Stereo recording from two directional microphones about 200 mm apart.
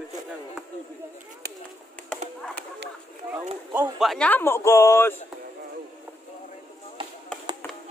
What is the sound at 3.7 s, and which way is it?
Speech, 5° right (ahead or behind).